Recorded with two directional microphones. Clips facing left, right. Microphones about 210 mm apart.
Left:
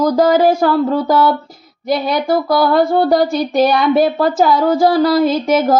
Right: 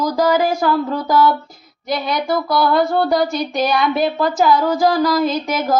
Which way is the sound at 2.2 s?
50° left (ahead or behind).